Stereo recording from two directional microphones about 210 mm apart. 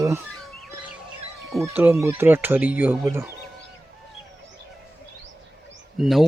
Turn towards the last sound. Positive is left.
turn(degrees=0)  # may be behind; listen again after turning